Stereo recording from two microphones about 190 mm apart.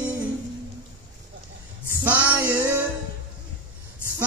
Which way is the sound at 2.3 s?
10° right (ahead or behind).